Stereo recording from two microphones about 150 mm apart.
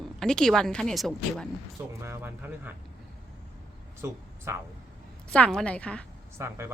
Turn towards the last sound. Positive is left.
turn(degrees=-15)  # may be behind; listen again after turning